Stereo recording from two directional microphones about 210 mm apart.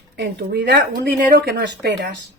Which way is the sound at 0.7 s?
50° right (ahead or behind).